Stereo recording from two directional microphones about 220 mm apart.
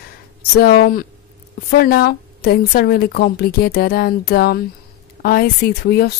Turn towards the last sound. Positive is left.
turn(degrees=45)  # may be behind; listen again after turning